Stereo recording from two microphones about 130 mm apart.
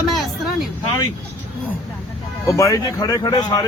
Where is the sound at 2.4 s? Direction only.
25° left (ahead or behind).